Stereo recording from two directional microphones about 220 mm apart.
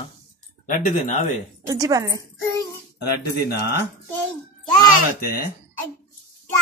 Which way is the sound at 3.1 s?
45° left (ahead or behind).